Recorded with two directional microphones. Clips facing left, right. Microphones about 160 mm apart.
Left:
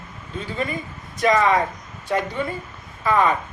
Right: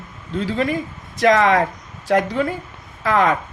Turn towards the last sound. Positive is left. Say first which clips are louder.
# right 2 dB
turn(degrees=-90)